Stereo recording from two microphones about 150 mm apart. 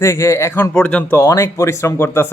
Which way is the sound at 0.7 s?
10° left (ahead or behind).